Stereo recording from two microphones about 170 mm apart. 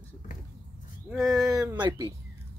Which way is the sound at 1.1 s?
Centre (ahead or behind).